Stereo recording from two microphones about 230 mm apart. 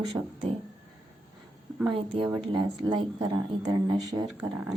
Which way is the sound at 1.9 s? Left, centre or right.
Right.